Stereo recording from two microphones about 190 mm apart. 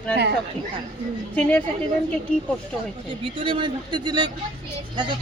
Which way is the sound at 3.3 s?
25° right (ahead or behind).